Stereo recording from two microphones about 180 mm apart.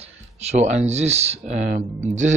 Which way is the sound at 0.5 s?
40° right (ahead or behind).